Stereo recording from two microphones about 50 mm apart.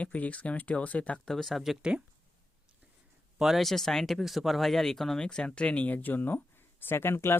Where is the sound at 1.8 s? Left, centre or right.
Centre.